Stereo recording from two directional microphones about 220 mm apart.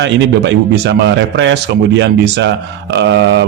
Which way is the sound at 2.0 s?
50° right (ahead or behind).